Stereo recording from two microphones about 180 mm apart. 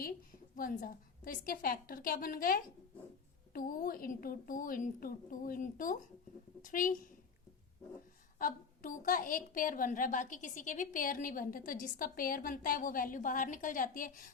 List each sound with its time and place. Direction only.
0.5 s a woman's voice: 50° left (ahead or behind)
8.4 s a woman's voice: 50° left (ahead or behind)